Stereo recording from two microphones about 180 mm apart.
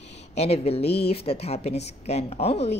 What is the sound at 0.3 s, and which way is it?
A woman's voice, 35° left (ahead or behind).